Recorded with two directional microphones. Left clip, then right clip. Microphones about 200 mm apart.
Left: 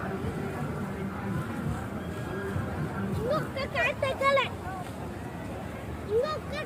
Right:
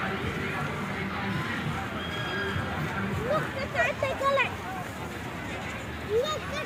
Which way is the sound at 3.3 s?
25° left (ahead or behind).